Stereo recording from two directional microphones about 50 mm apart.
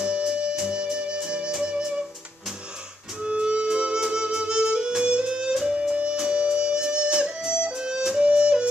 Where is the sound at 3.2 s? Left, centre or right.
Centre.